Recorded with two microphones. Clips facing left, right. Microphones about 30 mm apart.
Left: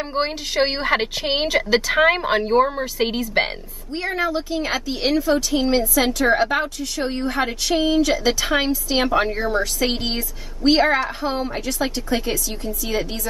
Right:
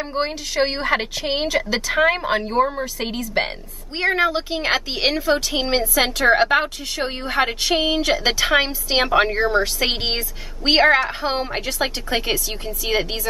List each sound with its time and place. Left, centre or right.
0.0 s a woman's voice: centre
3.9 s a woman's voice: right
5.2 s a woman's voice: right
8.0 s a woman's voice: right